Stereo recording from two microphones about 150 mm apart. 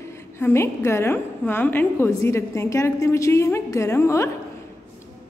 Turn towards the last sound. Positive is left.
turn(degrees=20)  # may be behind; listen again after turning